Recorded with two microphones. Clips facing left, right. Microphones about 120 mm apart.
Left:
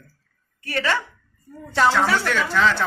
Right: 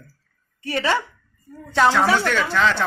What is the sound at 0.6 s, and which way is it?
Speech, 25° right (ahead or behind).